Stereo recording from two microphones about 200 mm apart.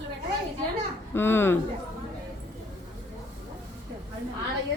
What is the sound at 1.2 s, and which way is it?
Speech, 10° left (ahead or behind).